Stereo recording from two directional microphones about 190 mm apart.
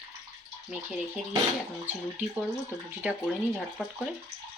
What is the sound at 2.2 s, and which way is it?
Speech, 10° right (ahead or behind).